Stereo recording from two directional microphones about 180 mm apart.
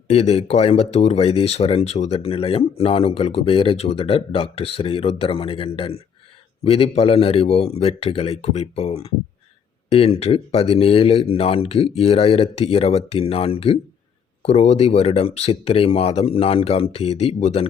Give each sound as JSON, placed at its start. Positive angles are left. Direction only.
{"t": 0.1, "sound": "speech", "side_deg": 35}